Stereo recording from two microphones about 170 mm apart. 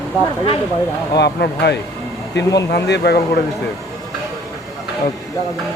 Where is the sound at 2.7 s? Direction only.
75° left (ahead or behind).